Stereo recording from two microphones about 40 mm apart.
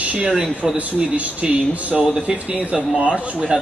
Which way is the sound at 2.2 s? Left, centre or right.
Right.